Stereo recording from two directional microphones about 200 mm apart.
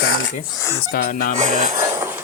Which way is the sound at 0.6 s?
15° left (ahead or behind).